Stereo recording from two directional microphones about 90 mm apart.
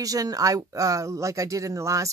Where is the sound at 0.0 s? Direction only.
40° right (ahead or behind).